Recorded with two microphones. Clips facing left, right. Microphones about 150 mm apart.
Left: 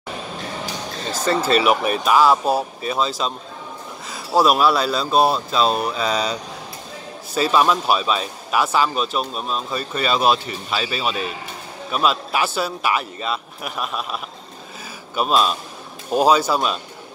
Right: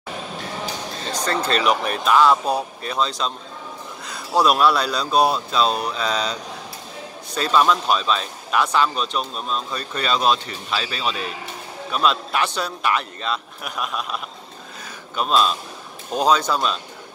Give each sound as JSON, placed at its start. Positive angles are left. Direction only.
{"t": 1.1, "sound": "speech", "side_deg": 5}
{"t": 7.3, "sound": "speech", "side_deg": 5}